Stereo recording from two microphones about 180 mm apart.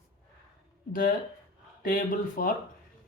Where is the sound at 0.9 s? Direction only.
50° left (ahead or behind).